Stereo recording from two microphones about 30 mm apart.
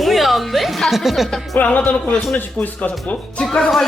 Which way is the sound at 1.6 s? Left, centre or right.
Left.